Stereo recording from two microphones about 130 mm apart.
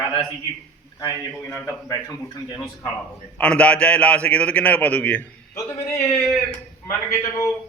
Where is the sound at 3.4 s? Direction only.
10° left (ahead or behind).